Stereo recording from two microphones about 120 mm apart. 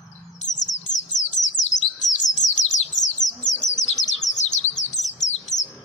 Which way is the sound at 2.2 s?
90° left.